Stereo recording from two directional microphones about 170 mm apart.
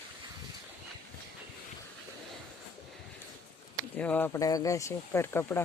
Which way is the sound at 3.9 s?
10° left (ahead or behind).